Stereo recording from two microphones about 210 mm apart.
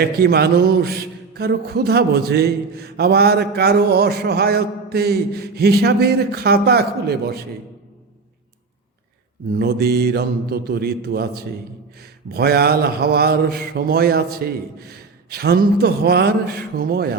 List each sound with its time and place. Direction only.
0.0 s a man's voice: 50° right (ahead or behind)
9.6 s a man's voice: 50° right (ahead or behind)